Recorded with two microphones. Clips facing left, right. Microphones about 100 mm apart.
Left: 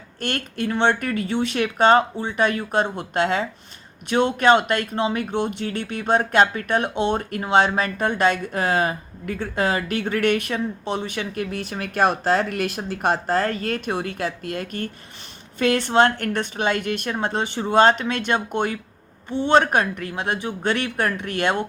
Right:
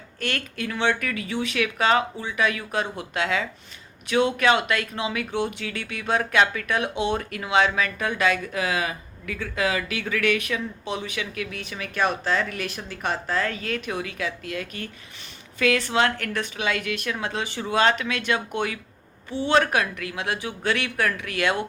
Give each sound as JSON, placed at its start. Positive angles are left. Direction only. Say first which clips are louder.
{"t": 0.3, "sound": "speech", "louder": "left 4 dB", "side_deg": 40}
{"t": 0.9, "sound": "speech", "louder": "left 5 dB", "side_deg": 45}
{"t": 2.9, "sound": "speech", "louder": "left 4 dB", "side_deg": 50}
{"t": 4.4, "sound": "speech", "louder": "left 4 dB", "side_deg": 40}
{"t": 5.3, "sound": "speech", "louder": "left 2 dB", "side_deg": 50}
{"t": 5.8, "sound": "speech", "louder": "left 4 dB", "side_deg": 35}
{"t": 7.1, "sound": "speech", "louder": "left 4 dB", "side_deg": 40}
{"t": 15.5, "sound": "a woman's voice", "louder": "left 4 dB", "side_deg": 30}
{"t": 19.5, "sound": "speech", "louder": "left 4 dB", "side_deg": 30}
{"t": 20.8, "sound": "speech", "louder": "left 2 dB", "side_deg": 35}